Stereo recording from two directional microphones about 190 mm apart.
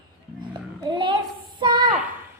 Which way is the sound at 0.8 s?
25° right (ahead or behind).